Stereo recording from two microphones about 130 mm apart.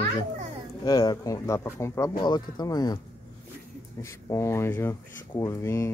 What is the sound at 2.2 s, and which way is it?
Speech, 35° left (ahead or behind).